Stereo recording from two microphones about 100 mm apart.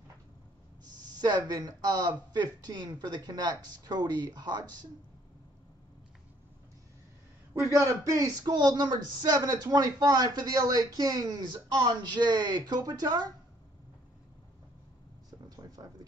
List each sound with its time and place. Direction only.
0.8 s speech: 45° right (ahead or behind)
7.7 s speech: 35° right (ahead or behind)
15.5 s a sound: 40° right (ahead or behind)